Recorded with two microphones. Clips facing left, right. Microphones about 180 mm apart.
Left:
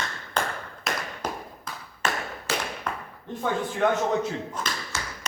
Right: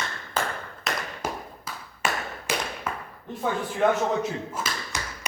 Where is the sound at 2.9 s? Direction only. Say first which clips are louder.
Even; 5° right (ahead or behind).